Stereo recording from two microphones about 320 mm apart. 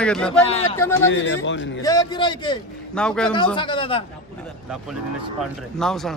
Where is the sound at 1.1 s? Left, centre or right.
Left.